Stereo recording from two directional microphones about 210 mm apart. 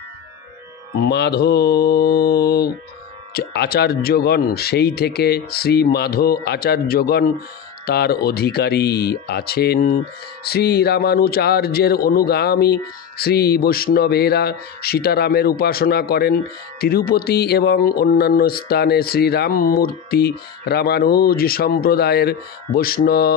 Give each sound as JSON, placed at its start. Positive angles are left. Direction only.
{"t": 1.0, "sound": "speech", "side_deg": 50}